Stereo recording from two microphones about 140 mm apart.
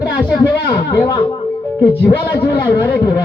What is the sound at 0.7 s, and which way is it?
Speech, 20° left (ahead or behind).